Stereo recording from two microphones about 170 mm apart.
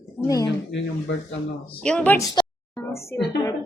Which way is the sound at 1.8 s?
5° left (ahead or behind).